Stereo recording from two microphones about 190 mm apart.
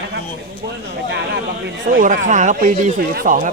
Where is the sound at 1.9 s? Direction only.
45° right (ahead or behind).